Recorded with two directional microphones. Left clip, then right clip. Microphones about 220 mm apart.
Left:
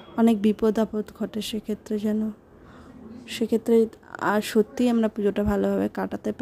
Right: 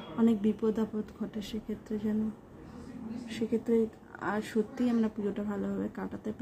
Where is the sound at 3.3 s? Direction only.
45° left (ahead or behind).